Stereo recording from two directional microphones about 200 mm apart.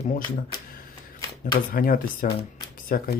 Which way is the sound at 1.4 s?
45° left (ahead or behind).